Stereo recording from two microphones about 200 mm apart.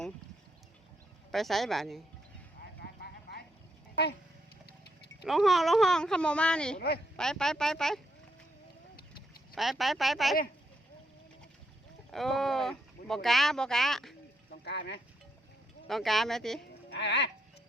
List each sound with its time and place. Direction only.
1.3 s speech: centre (ahead or behind)
2.6 s a sound: 50° left (ahead or behind)
5.2 s speech: centre (ahead or behind)
6.7 s a woman's voice: 50° left (ahead or behind)
7.2 s speech: 5° left (ahead or behind)
9.6 s speech: centre (ahead or behind)
12.1 s speech: centre (ahead or behind)
14.6 s speech: 60° left (ahead or behind)
15.9 s speech: centre (ahead or behind)
16.9 s speech: 60° left (ahead or behind)